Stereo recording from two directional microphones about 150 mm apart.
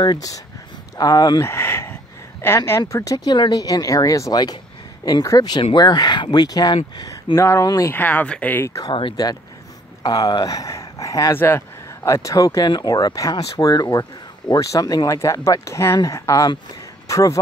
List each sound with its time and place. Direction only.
0.0 s speech: 25° left (ahead or behind)
8.9 s speech: 30° left (ahead or behind)